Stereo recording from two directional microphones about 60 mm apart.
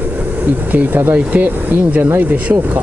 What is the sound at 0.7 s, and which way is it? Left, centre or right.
Speech, right.